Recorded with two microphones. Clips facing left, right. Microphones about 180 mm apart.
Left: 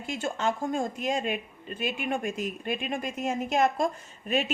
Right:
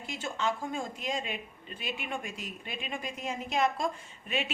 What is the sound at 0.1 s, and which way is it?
A woman's voice, 50° left (ahead or behind).